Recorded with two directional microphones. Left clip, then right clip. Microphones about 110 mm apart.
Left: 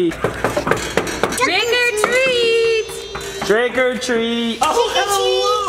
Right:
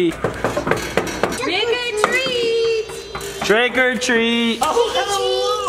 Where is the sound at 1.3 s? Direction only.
30° left (ahead or behind).